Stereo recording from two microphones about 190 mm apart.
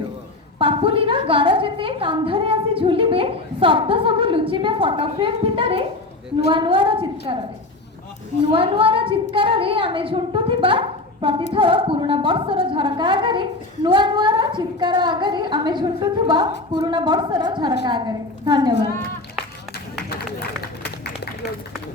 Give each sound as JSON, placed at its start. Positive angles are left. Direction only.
{"t": 0.6, "sound": "a woman's voice", "side_deg": -25}
{"t": 8.4, "sound": "a woman's voice", "side_deg": -25}